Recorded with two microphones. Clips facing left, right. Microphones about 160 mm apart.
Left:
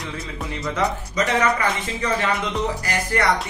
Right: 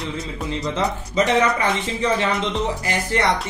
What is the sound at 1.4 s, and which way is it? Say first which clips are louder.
Speech: right 2 dB; 25° right (ahead or behind).